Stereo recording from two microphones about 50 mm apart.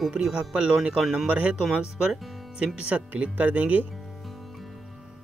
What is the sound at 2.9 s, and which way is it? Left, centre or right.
Speech, right.